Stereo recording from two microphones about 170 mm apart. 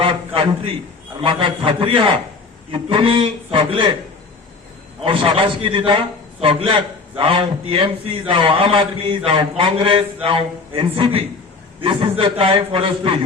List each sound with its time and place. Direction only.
1.2 s a man's voice: 30° right (ahead or behind)
4.9 s a man's voice: 30° right (ahead or behind)